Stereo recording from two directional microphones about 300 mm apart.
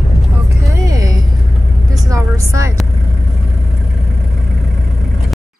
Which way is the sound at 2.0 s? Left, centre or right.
Centre.